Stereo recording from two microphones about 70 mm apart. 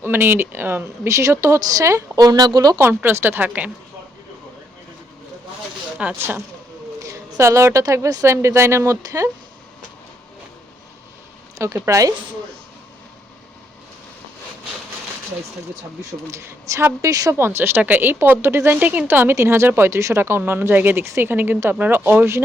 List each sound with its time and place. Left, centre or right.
0.0 s a woman's voice: right
1.0 s speech: right
3.0 s a woman's voice: right
6.1 s a woman's voice: right
7.0 s a woman's voice: right
11.5 s speech: right
16.3 s speech: right
17.3 s a woman's voice: right